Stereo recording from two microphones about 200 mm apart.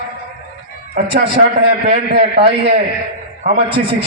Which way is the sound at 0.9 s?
45° right (ahead or behind).